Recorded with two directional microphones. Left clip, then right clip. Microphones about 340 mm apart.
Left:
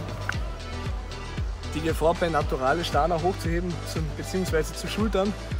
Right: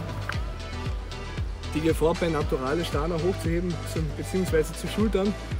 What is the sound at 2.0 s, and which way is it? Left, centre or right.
Speech, centre.